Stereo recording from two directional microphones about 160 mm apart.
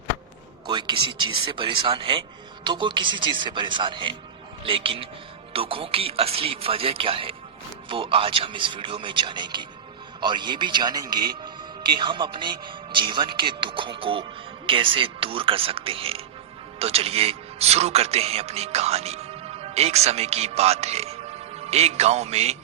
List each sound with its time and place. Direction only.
0.7 s a man's voice: 30° right (ahead or behind)